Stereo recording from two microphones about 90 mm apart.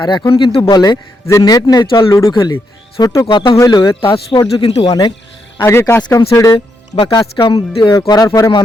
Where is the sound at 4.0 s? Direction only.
80° left.